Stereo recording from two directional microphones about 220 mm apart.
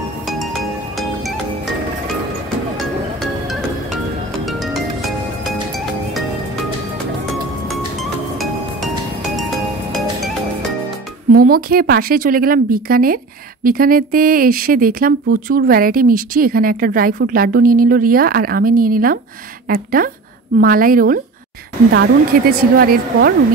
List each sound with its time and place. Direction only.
0.9 s music: centre (ahead or behind)
4.5 s music: centre (ahead or behind)
7.6 s music: centre (ahead or behind)
11.3 s speech: 40° right (ahead or behind)